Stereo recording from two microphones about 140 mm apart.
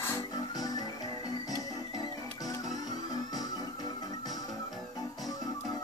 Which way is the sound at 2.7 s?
60° right (ahead or behind).